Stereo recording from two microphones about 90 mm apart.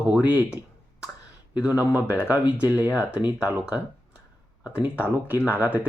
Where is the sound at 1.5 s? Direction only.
15° right (ahead or behind).